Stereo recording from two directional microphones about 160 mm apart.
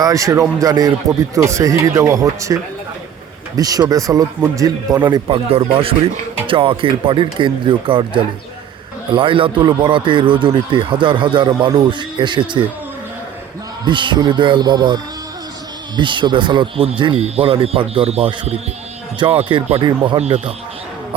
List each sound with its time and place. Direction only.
0.0 s speech: 20° right (ahead or behind)
3.6 s speech: 25° right (ahead or behind)
13.8 s speech: 30° right (ahead or behind)